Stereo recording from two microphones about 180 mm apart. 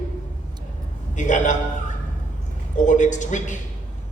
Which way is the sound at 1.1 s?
45° left (ahead or behind).